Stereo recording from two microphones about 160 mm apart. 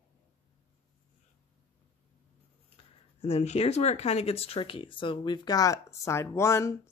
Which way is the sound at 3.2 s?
40° left (ahead or behind).